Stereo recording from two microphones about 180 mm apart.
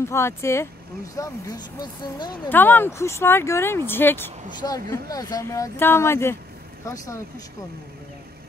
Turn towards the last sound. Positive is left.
turn(degrees=15)  # may be behind; listen again after turning